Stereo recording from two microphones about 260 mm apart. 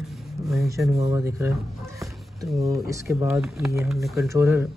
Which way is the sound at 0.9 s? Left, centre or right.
Centre.